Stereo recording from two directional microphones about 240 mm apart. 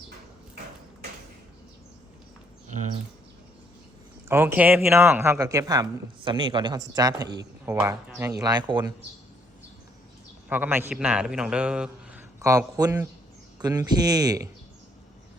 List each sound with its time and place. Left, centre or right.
4.3 s speech: centre
10.5 s a man's voice: centre